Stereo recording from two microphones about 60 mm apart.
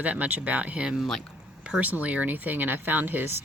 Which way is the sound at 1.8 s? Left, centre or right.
Right.